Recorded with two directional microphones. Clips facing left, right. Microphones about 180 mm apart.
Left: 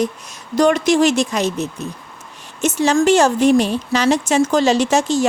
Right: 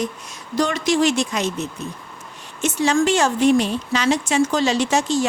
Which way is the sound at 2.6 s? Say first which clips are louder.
Left 3 dB; 45° left (ahead or behind).